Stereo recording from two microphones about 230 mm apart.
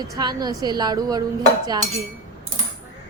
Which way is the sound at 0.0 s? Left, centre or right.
Centre.